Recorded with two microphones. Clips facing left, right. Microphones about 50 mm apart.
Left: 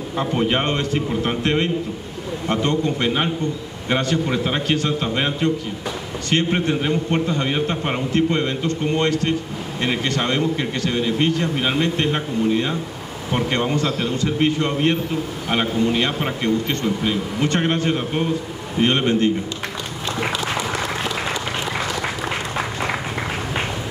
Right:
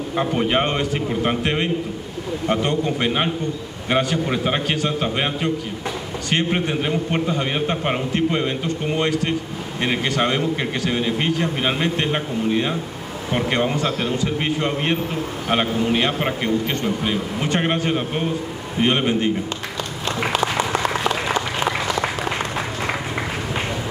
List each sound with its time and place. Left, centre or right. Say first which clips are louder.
0.3 s a man's voice: left 1 dB; centre